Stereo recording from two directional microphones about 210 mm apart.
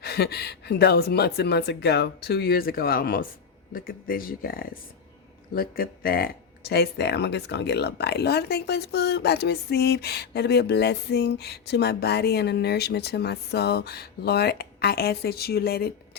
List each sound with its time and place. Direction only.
0.0 s speech: 50° left (ahead or behind)